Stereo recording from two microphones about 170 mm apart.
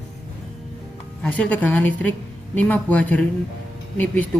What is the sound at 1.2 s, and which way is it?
Speech, 10° left (ahead or behind).